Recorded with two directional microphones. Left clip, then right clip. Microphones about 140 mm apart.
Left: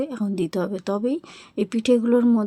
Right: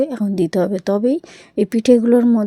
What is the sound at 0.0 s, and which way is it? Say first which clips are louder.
A woman's voice: right 7 dB; 30° right (ahead or behind).